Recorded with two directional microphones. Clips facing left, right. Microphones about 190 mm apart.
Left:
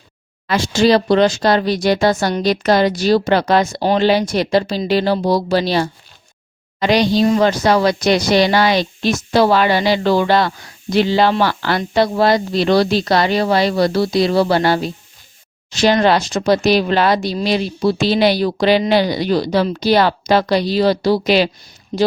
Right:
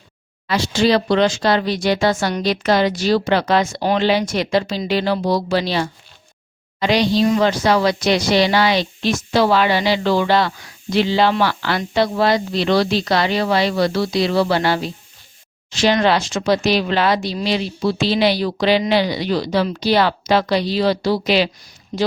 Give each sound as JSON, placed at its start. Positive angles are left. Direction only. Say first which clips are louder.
{"t": 0.4, "sound": "a woman's voice", "louder": "left 3 dB", "side_deg": 50}
{"t": 21.9, "sound": "speech", "louder": "left 4 dB", "side_deg": 25}